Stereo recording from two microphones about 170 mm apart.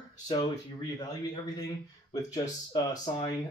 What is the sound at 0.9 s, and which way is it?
Speech, 25° left (ahead or behind).